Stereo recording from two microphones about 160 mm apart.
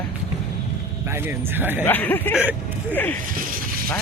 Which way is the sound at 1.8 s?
10° left (ahead or behind).